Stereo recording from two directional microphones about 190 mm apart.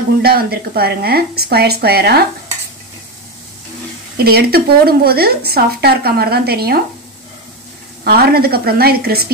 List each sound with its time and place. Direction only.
0.2 s a woman's voice: 55° right (ahead or behind)
4.2 s a woman's voice: 55° right (ahead or behind)
8.0 s a woman's voice: 55° right (ahead or behind)